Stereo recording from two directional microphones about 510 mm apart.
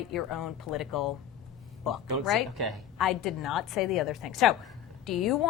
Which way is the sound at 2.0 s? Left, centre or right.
Right.